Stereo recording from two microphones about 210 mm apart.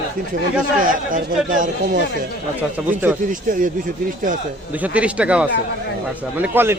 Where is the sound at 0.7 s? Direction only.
40° right (ahead or behind).